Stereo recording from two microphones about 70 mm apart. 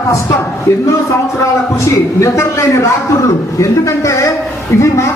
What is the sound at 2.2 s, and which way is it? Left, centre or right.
Speech, left.